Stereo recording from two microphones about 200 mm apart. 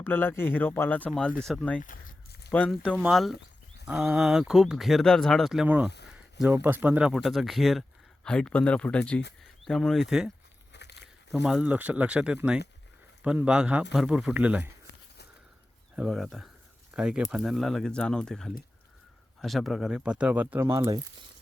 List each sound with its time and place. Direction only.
0.0 s speech: 10° left (ahead or behind)
1.8 s a sound: 45° left (ahead or behind)
2.5 s speech: 5° left (ahead or behind)
10.7 s a sound: 60° left (ahead or behind)
11.3 s speech: 5° right (ahead or behind)
16.0 s speech: centre (ahead or behind)